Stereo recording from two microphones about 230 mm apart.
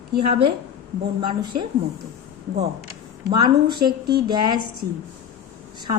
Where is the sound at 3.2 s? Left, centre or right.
Centre.